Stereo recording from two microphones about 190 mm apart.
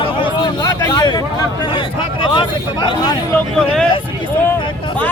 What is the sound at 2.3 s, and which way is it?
Speech, 25° left (ahead or behind).